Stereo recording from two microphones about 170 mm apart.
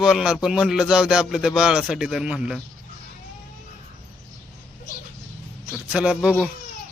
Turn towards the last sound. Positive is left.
turn(degrees=-5)  # may be behind; listen again after turning